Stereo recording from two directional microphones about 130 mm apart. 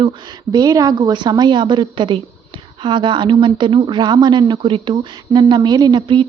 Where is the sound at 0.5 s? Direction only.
25° right (ahead or behind).